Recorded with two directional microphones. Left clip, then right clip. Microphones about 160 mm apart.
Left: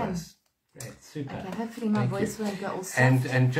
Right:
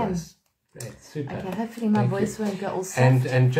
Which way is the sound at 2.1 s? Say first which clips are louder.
Right 4 dB; 20° right (ahead or behind).